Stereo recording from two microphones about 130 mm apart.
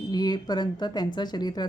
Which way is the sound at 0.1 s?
30° left (ahead or behind).